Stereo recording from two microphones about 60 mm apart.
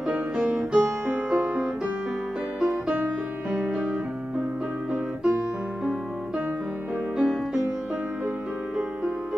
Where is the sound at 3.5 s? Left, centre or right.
Centre.